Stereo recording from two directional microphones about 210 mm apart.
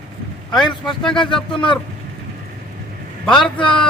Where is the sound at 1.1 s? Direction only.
20° left (ahead or behind).